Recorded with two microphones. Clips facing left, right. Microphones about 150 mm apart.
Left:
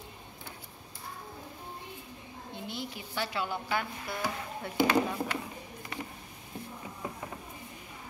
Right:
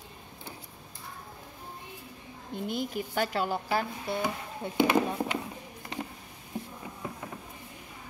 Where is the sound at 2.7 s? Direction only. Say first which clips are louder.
Right 9 dB; 45° right (ahead or behind); by 5.4 s 20° right (ahead or behind).